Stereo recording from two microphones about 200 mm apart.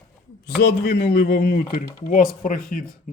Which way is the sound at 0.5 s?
50° left (ahead or behind).